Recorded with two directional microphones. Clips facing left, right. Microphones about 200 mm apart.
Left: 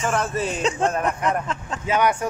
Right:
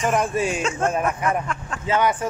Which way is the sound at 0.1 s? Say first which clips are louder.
Right 2 dB; 15° right (ahead or behind).